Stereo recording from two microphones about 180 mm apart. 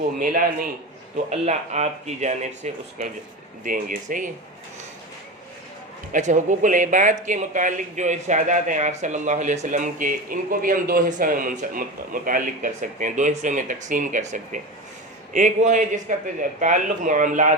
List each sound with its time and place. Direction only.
0.2 s speech: 50° right (ahead or behind)
1.1 s speech: 40° right (ahead or behind)
3.6 s speech: 45° right (ahead or behind)
6.1 s speech: 45° right (ahead or behind)